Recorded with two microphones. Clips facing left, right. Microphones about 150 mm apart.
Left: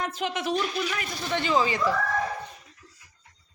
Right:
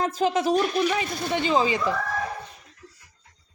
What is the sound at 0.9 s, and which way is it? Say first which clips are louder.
A woman's voice: right 4 dB; 20° right (ahead or behind).